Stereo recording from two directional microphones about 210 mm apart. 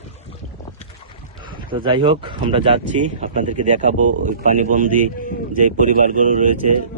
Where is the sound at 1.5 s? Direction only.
25° right (ahead or behind).